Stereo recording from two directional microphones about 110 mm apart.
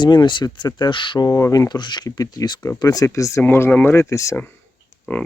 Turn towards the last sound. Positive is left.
turn(degrees=10)  # may be behind; listen again after turning